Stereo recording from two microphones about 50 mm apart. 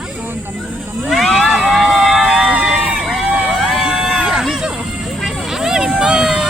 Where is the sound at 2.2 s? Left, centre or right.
Centre.